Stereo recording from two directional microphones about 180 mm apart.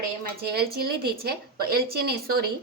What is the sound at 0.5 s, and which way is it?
A woman's voice, 60° right (ahead or behind).